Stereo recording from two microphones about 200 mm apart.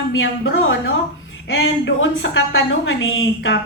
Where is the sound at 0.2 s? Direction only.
75° left (ahead or behind).